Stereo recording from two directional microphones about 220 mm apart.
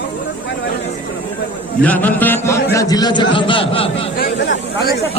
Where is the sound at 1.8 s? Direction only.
5° left (ahead or behind); by 4.1 s 25° left (ahead or behind).